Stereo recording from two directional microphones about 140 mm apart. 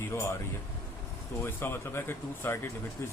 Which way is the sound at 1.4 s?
15° left (ahead or behind).